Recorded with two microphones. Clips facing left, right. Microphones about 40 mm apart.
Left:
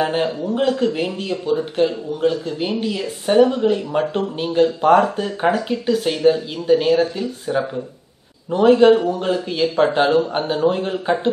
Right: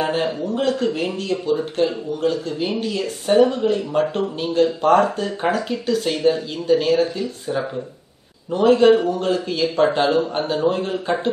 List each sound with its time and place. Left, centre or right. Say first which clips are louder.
0.0 s a man's voice: left 1 dB; centre